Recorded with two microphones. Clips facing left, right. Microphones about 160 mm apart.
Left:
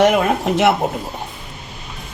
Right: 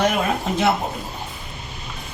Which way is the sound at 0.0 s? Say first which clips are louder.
Left 6 dB; 75° left (ahead or behind).